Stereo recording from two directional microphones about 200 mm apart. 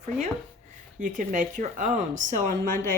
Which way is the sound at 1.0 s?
40° right (ahead or behind).